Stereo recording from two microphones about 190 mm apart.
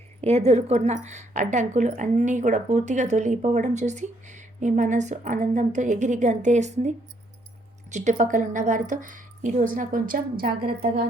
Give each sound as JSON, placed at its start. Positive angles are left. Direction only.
{"t": 0.2, "sound": "a woman's voice", "side_deg": -35}